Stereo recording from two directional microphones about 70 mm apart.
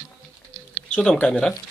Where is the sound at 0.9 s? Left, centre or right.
Centre.